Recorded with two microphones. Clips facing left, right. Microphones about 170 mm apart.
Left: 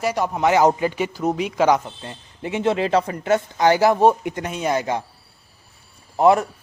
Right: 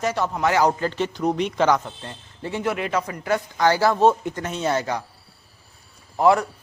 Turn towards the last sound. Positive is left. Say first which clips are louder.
# left 2 dB
turn(degrees=20)  # may be behind; listen again after turning